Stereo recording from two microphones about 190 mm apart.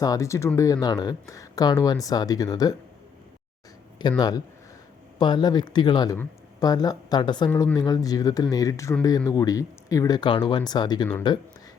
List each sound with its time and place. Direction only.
0.0 s speech: 15° left (ahead or behind)
4.2 s speech: 20° left (ahead or behind)